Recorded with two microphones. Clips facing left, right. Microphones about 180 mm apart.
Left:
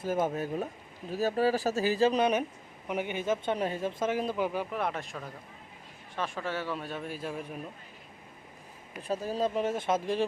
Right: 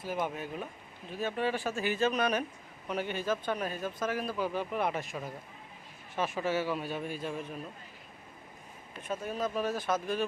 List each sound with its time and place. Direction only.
0.0 s speech: 45° left (ahead or behind); by 2.4 s 25° left (ahead or behind)
2.8 s a man's voice: 15° left (ahead or behind)
4.7 s a man's voice: centre (ahead or behind)
9.0 s a man's voice: 35° left (ahead or behind)